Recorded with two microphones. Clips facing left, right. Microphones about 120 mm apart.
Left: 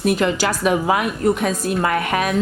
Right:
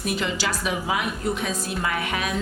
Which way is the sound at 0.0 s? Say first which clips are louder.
Left 8 dB; 55° left (ahead or behind).